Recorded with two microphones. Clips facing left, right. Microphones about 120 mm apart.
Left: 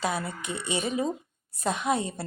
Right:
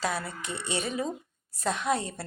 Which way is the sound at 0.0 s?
15° left (ahead or behind).